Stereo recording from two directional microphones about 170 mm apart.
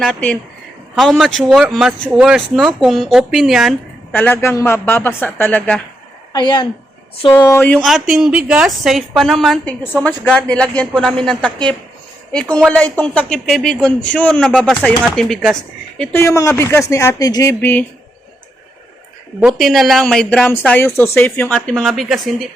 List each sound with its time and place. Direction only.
0.0 s speech: 5° left (ahead or behind)
4.1 s speech: 10° left (ahead or behind)
6.3 s a woman's voice: 25° left (ahead or behind)
7.9 s speech: centre (ahead or behind)
16.0 s speech: 15° left (ahead or behind)
19.4 s speech: centre (ahead or behind)